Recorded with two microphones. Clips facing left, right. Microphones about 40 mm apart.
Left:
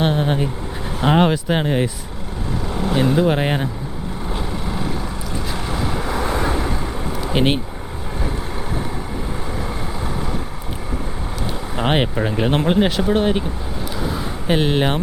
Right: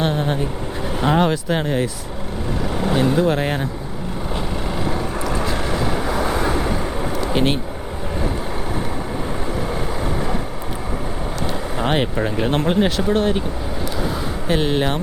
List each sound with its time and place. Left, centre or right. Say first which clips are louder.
0.0 s speech: left 2 dB; centre
2.6 s vehicle: right 1 dB; centre
2.9 s speech: left 1 dB; centre
5.5 s vehicle: right 3 dB; centre
7.3 s speech: left 2 dB; centre
11.8 s speech: left 1 dB; centre
14.4 s speech: left 2 dB; centre